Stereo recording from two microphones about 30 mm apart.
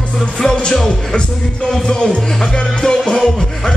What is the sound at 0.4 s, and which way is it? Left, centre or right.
Music, centre.